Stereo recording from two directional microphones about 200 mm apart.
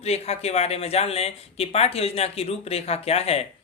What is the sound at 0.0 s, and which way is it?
Speech, 30° left (ahead or behind).